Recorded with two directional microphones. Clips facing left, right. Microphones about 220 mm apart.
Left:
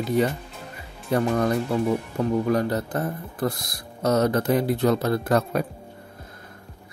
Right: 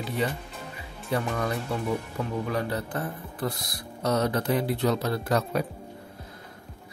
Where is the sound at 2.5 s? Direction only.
40° left (ahead or behind).